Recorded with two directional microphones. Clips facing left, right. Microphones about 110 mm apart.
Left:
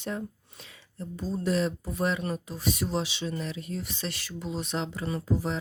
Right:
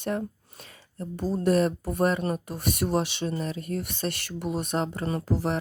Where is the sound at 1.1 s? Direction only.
65° right (ahead or behind).